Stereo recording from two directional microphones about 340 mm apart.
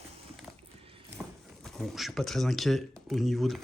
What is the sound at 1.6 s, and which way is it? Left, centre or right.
Speech, centre.